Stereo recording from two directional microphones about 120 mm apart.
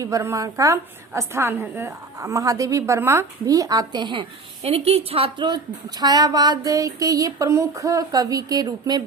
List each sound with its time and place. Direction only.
0.0 s a woman's voice: 25° right (ahead or behind); by 5.5 s 50° right (ahead or behind)
6.0 s a woman's voice: 35° right (ahead or behind)